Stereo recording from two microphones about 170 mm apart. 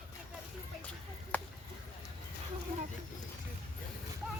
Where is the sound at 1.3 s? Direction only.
10° left (ahead or behind).